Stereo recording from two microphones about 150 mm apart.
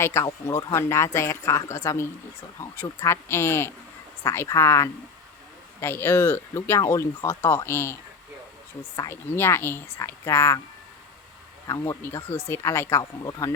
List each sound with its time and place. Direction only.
0.0 s speech: 20° left (ahead or behind)
11.7 s speech: 20° left (ahead or behind)